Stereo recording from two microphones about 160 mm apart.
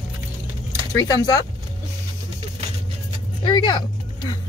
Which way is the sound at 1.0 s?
25° left (ahead or behind).